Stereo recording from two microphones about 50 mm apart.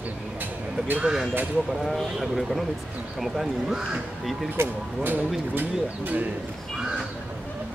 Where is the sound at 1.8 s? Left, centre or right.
Centre.